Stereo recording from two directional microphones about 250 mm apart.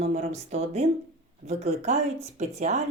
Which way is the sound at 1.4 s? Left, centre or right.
Right.